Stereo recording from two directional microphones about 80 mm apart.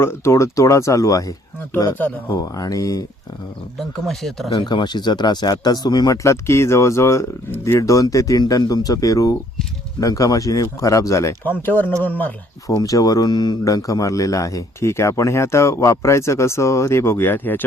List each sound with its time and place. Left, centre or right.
0.0 s speech: left
3.8 s speech: centre
4.5 s speech: left
6.2 s speech: left
11.6 s speech: left
12.6 s speech: left
13.7 s speech: left